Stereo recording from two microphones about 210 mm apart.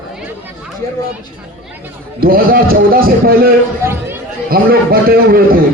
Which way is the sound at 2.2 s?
45° right (ahead or behind).